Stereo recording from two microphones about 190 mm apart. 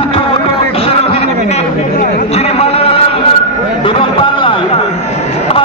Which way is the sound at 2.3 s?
30° left (ahead or behind).